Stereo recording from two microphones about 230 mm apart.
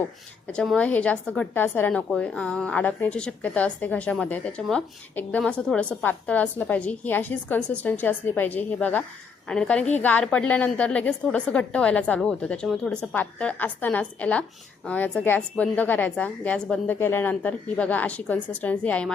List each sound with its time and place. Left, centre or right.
0.4 s a woman's voice: centre